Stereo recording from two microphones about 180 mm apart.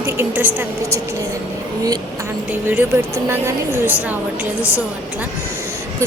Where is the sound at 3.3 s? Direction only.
15° right (ahead or behind).